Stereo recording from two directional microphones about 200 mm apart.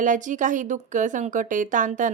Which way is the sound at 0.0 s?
40° right (ahead or behind).